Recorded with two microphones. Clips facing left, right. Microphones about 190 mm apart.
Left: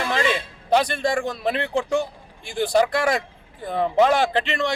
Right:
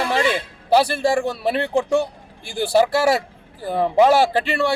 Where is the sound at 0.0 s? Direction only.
35° right (ahead or behind).